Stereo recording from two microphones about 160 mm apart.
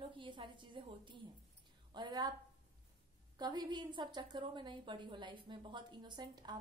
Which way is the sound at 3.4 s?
25° right (ahead or behind).